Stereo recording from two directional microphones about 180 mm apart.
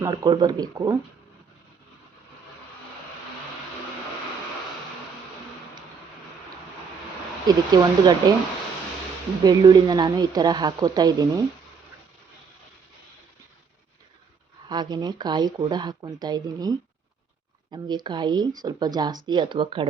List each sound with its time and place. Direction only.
0.0 s speech: 25° right (ahead or behind)
7.4 s speech: 20° right (ahead or behind)
9.4 s speech: 20° right (ahead or behind)
14.7 s speech: 25° right (ahead or behind)